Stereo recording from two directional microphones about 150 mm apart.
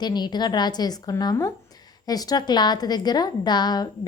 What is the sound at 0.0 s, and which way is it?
A woman's voice, 30° left (ahead or behind).